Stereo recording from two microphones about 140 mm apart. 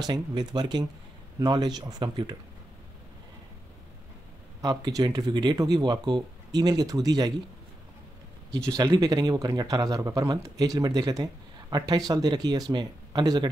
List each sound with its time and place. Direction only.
0.0 s speech: 30° right (ahead or behind)
4.6 s speech: 25° right (ahead or behind)
8.6 s speech: 25° right (ahead or behind)